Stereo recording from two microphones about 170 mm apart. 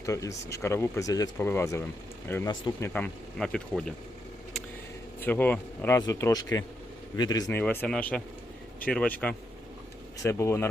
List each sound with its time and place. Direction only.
0.0 s speech: 20° left (ahead or behind)
2.9 s speech: 5° left (ahead or behind)
5.2 s speech: 10° left (ahead or behind)
7.6 s speech: 10° left (ahead or behind)